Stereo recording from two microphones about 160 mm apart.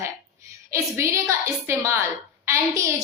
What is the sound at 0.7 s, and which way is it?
A woman's voice, 15° right (ahead or behind).